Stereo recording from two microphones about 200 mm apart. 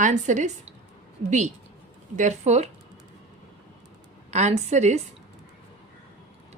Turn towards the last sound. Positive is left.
turn(degrees=-35)  # may be behind; listen again after turning